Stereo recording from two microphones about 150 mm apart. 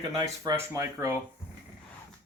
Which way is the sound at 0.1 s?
25° right (ahead or behind).